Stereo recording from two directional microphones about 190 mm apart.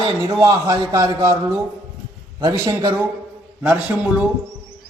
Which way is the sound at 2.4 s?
20° right (ahead or behind).